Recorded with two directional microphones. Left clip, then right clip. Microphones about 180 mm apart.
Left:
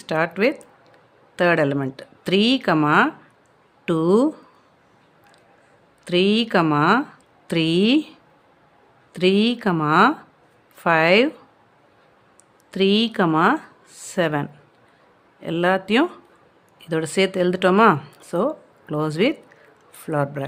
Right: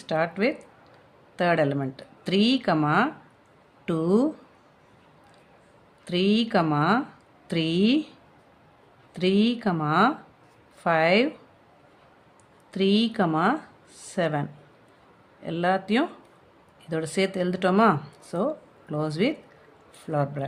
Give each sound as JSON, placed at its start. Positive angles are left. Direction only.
{"t": 0.0, "sound": "speech", "side_deg": 30}
{"t": 6.1, "sound": "speech", "side_deg": 30}
{"t": 9.1, "sound": "speech", "side_deg": 30}
{"t": 12.7, "sound": "a man's voice", "side_deg": 30}